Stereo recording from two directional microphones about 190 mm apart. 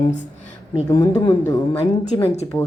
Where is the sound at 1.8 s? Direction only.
35° left (ahead or behind).